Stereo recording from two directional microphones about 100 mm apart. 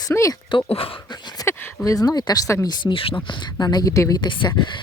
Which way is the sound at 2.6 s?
60° left (ahead or behind).